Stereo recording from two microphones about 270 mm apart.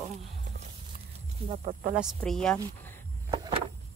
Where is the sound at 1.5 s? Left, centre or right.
Right.